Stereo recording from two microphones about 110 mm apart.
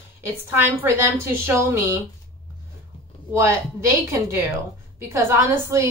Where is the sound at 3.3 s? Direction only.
25° right (ahead or behind).